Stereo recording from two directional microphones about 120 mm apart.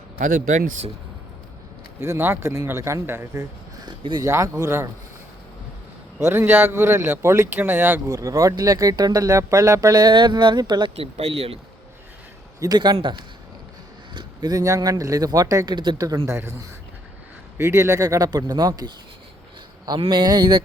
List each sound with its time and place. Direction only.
0.2 s speech: 90° right
2.0 s speech: 20° right (ahead or behind)
3.8 s speech: 40° right (ahead or behind)
4.3 s speech: 25° right (ahead or behind)
6.2 s speech: 20° right (ahead or behind); by 10.9 s 35° right (ahead or behind)
10.9 s speech: 55° right (ahead or behind)
12.5 s speech: 35° right (ahead or behind)
20.0 s speech: 40° right (ahead or behind)